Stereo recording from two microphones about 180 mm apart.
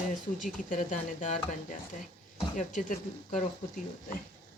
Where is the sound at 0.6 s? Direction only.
45° left (ahead or behind).